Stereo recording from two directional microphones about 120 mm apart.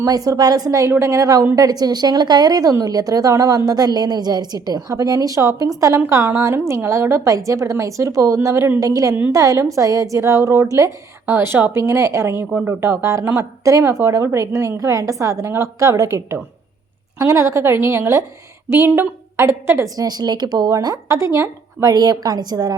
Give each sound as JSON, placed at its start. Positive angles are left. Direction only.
{"t": 0.0, "sound": "a woman's voice", "side_deg": -30}
{"t": 12.5, "sound": "speech", "side_deg": -10}
{"t": 12.8, "sound": "a woman's voice", "side_deg": -20}